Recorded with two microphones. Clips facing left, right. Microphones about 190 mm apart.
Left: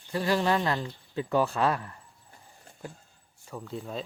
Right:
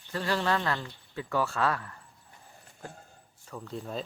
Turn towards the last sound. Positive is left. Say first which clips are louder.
# left 1 dB
turn(degrees=0)  # may be behind; listen again after turning